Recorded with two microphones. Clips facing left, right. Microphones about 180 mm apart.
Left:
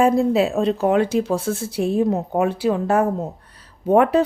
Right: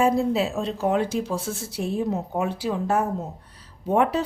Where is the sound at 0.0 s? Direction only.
55° left (ahead or behind).